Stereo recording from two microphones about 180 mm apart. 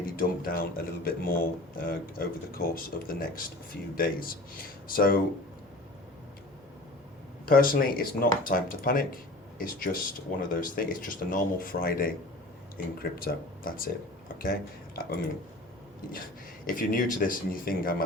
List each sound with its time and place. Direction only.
0.0 s speech: 55° left (ahead or behind)
7.4 s speech: 50° left (ahead or behind)
16.6 s speech: 50° left (ahead or behind)